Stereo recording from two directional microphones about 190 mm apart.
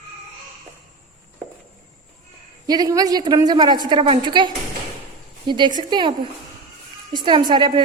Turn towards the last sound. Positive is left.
turn(degrees=-25)  # may be behind; listen again after turning